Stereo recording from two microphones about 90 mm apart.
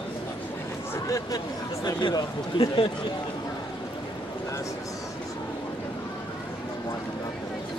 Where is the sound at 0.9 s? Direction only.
40° left (ahead or behind).